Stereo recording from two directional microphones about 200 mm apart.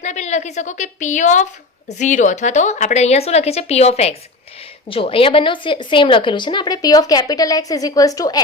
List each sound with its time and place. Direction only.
0.0 s a woman's voice: 35° left (ahead or behind); by 8.4 s 15° left (ahead or behind)